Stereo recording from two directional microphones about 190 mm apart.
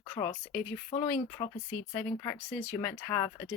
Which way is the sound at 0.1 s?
20° left (ahead or behind).